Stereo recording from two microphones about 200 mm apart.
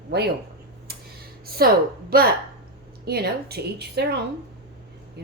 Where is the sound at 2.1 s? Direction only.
50° right (ahead or behind).